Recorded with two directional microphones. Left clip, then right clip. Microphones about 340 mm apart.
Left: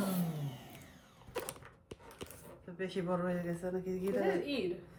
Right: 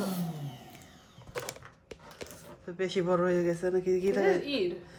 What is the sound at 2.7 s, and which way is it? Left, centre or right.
Speech, centre.